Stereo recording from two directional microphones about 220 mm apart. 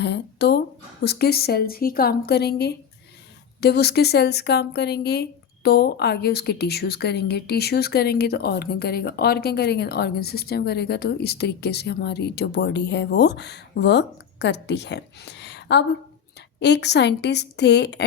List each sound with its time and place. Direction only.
0.0 s speech: 50° left (ahead or behind)